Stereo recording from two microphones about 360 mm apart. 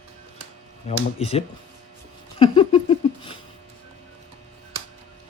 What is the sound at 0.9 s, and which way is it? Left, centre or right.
Speech, centre.